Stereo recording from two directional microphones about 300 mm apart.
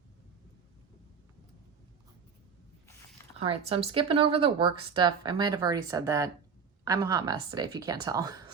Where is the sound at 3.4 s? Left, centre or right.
Centre.